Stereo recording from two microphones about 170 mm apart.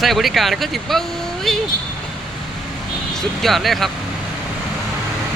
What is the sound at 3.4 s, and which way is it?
Speech, centre (ahead or behind).